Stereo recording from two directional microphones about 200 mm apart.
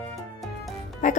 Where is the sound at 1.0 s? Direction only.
40° left (ahead or behind).